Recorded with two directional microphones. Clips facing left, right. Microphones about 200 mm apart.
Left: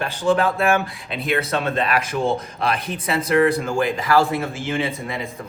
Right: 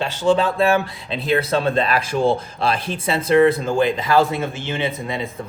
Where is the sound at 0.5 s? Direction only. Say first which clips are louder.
Right 2 dB; 30° right (ahead or behind).